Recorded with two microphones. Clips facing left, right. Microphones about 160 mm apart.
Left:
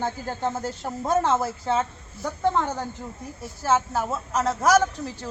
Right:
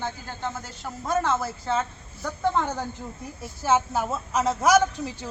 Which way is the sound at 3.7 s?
20° right (ahead or behind).